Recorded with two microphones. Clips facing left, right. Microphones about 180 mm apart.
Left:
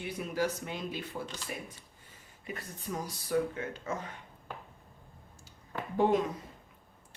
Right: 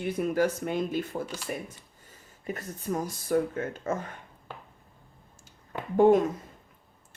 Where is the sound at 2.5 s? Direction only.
45° right (ahead or behind).